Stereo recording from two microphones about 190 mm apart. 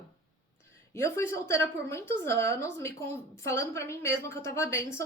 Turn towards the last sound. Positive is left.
turn(degrees=15)  # may be behind; listen again after turning